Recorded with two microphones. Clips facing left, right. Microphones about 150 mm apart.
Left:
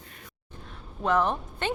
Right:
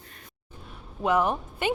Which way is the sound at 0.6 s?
10° right (ahead or behind).